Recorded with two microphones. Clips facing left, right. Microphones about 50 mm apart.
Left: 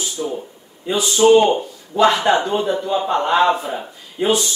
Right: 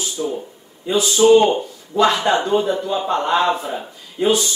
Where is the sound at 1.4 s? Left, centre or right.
Centre.